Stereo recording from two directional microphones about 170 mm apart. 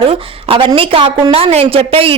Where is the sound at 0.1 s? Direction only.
30° right (ahead or behind).